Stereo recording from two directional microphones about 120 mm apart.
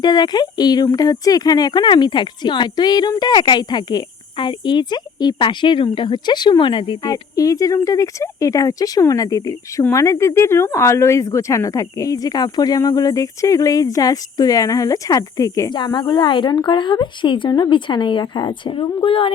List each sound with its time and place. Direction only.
0.0 s speech: 35° left (ahead or behind)
7.0 s speech: 30° left (ahead or behind)
15.7 s speech: 40° left (ahead or behind)